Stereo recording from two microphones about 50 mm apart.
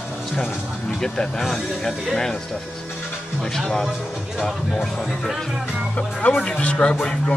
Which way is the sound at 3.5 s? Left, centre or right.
Centre.